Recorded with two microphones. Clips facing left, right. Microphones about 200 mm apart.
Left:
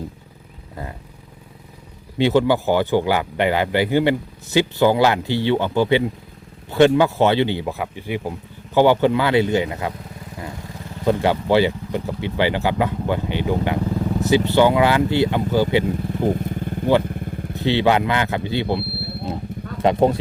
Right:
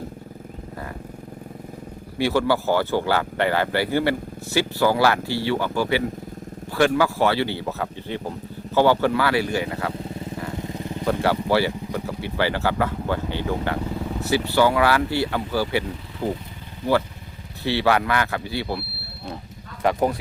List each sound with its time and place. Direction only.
2.1 s speech: 20° left (ahead or behind)
11.0 s speech: 20° left (ahead or behind)
16.0 s motorcycle: 50° left (ahead or behind)
17.6 s speech: 20° left (ahead or behind)